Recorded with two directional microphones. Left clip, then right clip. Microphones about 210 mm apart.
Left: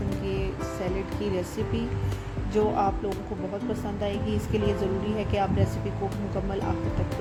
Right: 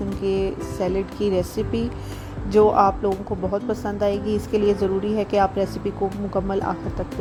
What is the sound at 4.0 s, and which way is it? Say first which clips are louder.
Speech: right 10 dB; 30° right (ahead or behind).